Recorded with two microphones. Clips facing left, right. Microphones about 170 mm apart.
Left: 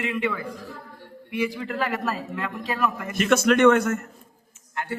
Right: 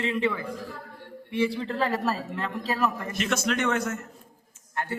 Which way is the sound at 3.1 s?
55° left (ahead or behind).